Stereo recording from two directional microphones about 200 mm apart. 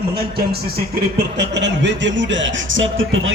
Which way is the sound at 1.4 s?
60° right (ahead or behind).